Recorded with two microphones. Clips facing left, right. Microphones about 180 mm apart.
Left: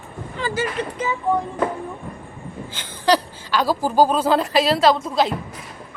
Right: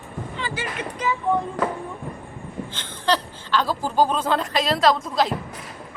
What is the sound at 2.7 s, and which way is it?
A woman's voice, 10° left (ahead or behind).